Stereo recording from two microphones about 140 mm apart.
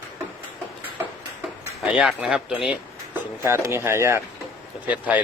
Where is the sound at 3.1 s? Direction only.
20° right (ahead or behind).